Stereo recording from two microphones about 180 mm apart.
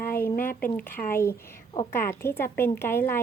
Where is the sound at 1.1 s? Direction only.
15° left (ahead or behind).